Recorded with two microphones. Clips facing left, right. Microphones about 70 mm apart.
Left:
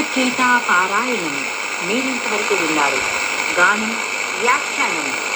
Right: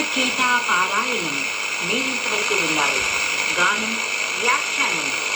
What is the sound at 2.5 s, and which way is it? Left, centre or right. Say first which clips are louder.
Speech: left 5 dB; left.